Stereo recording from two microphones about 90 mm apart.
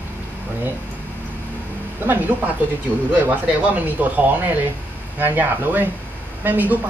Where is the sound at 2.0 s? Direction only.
20° right (ahead or behind).